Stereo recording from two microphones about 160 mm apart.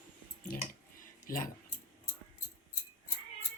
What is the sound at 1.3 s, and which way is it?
Speech, 60° left (ahead or behind).